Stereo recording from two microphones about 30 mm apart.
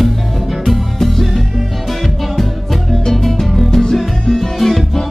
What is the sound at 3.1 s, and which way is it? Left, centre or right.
Music, centre.